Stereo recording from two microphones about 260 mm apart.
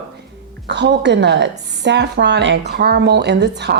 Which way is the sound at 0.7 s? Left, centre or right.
Right.